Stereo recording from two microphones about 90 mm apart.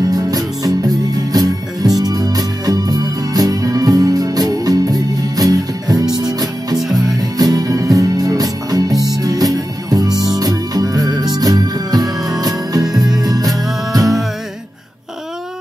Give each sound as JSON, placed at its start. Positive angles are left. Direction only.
{"t": 0.0, "sound": "music", "side_deg": -45}
{"t": 6.8, "sound": "music", "side_deg": -5}
{"t": 7.2, "sound": "music", "side_deg": -45}
{"t": 8.9, "sound": "music", "side_deg": -5}
{"t": 9.2, "sound": "music", "side_deg": -45}